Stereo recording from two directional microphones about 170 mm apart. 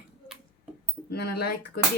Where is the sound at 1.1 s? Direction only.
70° left (ahead or behind).